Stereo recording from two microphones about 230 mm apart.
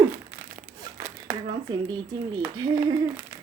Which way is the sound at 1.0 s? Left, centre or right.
Centre.